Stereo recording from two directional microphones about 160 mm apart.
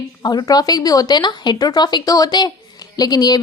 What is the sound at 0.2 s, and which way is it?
A woman's voice, 25° left (ahead or behind).